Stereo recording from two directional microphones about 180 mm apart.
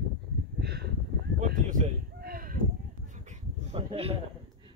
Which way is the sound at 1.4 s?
45° right (ahead or behind).